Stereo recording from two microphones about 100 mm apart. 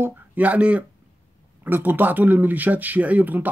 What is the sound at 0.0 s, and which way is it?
Speech, 15° right (ahead or behind).